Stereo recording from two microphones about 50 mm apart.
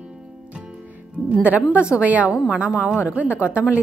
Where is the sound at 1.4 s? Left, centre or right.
Right.